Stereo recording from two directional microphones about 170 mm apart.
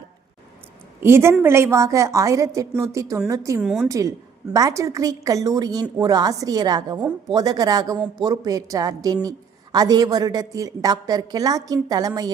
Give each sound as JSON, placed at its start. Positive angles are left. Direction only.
{"t": 1.0, "sound": "a woman's voice", "side_deg": -15}
{"t": 3.6, "sound": "a woman's voice", "side_deg": -5}
{"t": 3.8, "sound": "a woman's voice", "side_deg": -20}